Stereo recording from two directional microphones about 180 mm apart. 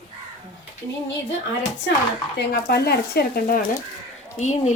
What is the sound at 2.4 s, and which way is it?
Speech, 60° left (ahead or behind).